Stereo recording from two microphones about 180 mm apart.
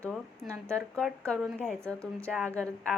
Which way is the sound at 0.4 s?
15° right (ahead or behind).